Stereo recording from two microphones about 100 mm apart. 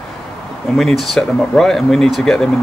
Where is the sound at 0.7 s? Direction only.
5° left (ahead or behind).